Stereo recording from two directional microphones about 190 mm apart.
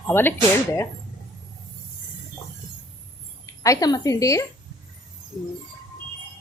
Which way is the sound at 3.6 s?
20° left (ahead or behind).